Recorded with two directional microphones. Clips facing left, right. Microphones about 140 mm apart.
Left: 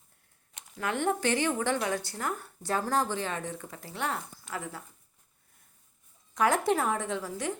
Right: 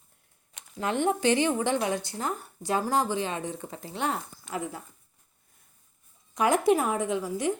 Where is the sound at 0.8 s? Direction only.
20° right (ahead or behind).